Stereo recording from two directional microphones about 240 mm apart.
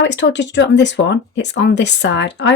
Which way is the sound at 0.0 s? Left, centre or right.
Left.